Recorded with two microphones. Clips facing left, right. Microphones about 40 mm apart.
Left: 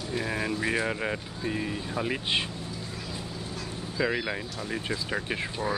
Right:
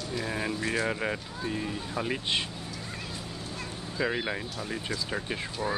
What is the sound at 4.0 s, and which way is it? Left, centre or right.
Speech, centre.